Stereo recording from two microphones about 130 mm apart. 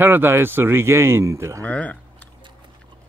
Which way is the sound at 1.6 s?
10° left (ahead or behind).